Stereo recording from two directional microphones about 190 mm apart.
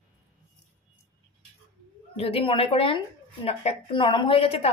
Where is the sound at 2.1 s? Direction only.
30° left (ahead or behind).